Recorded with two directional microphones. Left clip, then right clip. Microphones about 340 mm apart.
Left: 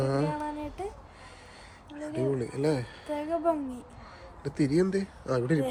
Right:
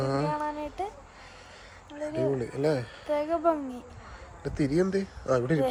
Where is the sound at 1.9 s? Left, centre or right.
Centre.